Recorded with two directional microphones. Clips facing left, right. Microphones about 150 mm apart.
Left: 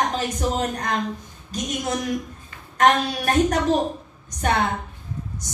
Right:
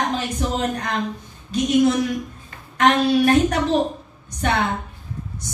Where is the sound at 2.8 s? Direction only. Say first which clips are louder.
Right 3 dB; 45° left (ahead or behind).